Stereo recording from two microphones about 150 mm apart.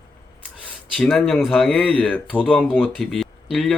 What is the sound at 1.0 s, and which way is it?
Speech, 5° left (ahead or behind).